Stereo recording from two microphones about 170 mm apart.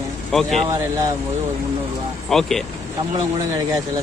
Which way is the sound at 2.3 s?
Centre (ahead or behind).